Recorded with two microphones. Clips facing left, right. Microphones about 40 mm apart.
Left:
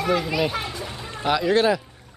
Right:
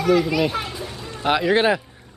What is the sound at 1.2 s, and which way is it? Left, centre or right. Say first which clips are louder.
Speech: right 1 dB; right.